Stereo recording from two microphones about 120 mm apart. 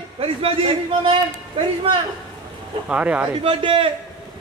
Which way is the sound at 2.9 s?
10° right (ahead or behind).